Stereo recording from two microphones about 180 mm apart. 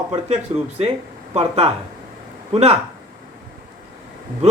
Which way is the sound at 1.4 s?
35° right (ahead or behind).